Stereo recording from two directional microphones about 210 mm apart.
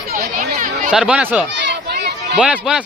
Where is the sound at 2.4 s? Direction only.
5° right (ahead or behind).